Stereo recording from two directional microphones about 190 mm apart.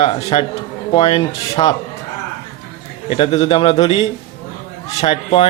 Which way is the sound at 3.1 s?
30° left (ahead or behind).